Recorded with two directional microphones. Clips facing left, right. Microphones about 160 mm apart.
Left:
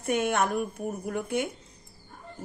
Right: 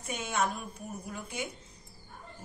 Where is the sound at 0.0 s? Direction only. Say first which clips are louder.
Left 7 dB; 60° left (ahead or behind).